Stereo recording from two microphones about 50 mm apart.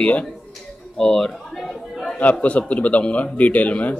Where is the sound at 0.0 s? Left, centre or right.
Left.